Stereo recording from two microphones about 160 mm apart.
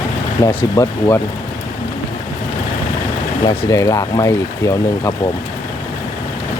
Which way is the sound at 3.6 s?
20° left (ahead or behind).